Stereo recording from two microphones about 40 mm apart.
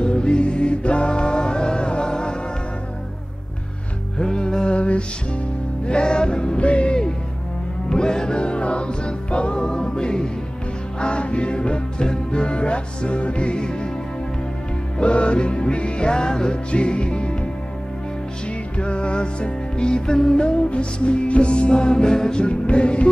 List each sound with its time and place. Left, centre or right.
0.0 s music: left
4.2 s music: centre
4.7 s music: left
7.9 s music: centre
15.0 s music: left
18.8 s music: left